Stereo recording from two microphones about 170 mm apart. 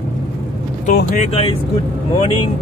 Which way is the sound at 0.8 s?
45° left (ahead or behind).